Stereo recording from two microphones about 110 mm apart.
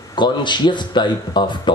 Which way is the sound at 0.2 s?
45° left (ahead or behind).